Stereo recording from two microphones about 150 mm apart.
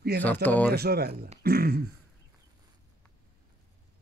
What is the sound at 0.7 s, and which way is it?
A man's voice, 90° right.